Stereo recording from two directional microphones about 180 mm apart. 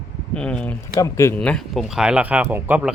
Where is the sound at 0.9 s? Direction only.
15° left (ahead or behind); by 2.9 s 10° right (ahead or behind).